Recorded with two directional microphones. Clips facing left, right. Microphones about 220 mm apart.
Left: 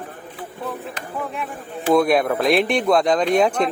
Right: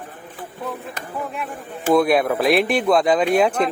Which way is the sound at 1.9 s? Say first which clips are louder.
Even; centre (ahead or behind).